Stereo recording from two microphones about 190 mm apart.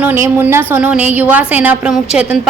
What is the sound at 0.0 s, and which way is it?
A woman's voice, 10° right (ahead or behind).